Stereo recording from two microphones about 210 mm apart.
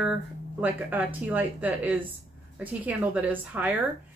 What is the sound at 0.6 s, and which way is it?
Speech, 10° right (ahead or behind).